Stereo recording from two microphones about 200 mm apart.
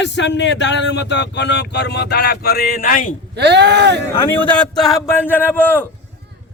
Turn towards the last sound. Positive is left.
turn(degrees=10)  # may be behind; listen again after turning